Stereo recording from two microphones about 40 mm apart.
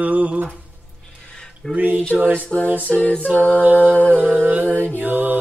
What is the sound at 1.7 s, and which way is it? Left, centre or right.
Speech, right.